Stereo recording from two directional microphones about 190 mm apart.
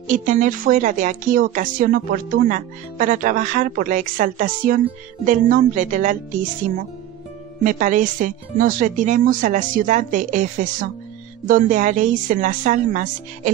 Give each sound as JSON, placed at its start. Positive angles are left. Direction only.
{"t": 0.1, "sound": "speech", "side_deg": -40}
{"t": 7.6, "sound": "speech", "side_deg": -45}